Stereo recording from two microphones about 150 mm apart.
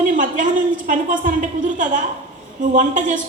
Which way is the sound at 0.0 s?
60° right (ahead or behind).